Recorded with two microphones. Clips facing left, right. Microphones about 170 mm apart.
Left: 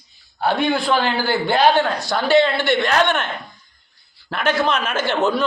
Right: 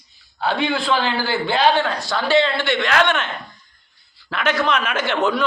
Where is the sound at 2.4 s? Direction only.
10° left (ahead or behind).